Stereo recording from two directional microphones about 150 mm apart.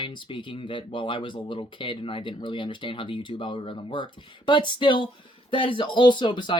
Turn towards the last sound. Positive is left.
turn(degrees=30)  # may be behind; listen again after turning